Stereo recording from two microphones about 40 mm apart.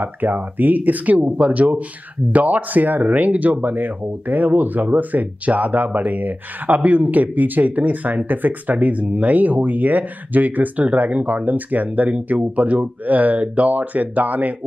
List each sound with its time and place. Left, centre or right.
0.0 s speech: right